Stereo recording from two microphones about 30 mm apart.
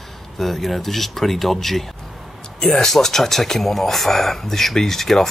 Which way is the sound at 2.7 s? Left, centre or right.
Centre.